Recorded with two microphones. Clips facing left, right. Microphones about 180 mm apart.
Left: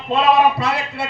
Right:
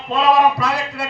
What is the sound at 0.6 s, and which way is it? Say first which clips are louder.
Speech: even; 30° left (ahead or behind).